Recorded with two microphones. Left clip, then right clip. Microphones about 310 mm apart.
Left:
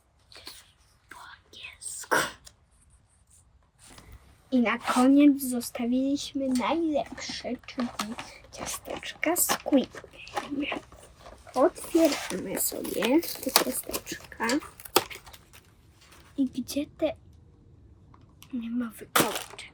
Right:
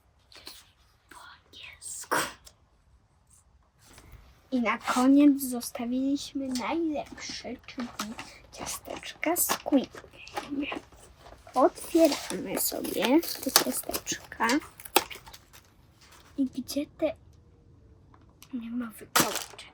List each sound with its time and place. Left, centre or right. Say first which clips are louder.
1.1 s whispering: left 2 dB; centre
4.4 s speech: left 2 dB; centre
11.2 s dog: left 2 dB; centre
11.5 s speech: even; centre
18.3 s speech: left 3 dB; centre